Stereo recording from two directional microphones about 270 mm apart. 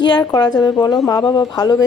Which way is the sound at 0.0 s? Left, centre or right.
Centre.